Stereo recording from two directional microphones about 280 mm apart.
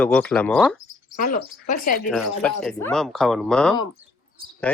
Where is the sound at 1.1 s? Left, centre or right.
Left.